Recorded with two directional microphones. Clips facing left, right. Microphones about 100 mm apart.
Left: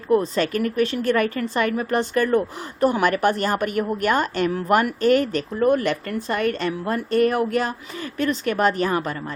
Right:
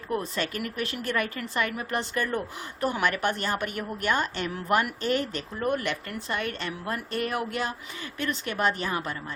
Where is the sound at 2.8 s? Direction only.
35° left (ahead or behind).